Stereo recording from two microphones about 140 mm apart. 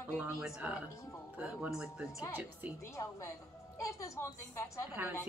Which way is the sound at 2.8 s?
20° left (ahead or behind).